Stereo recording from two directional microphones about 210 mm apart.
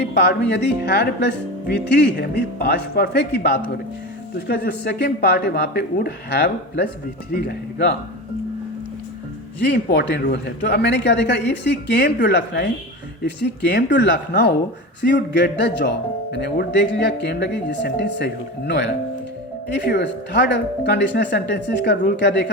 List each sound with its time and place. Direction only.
0.0 s speech: 55° left (ahead or behind)
9.6 s a man's voice: 55° left (ahead or behind)